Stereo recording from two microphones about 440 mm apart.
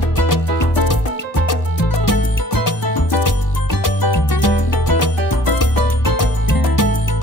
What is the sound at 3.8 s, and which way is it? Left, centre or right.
Music, left.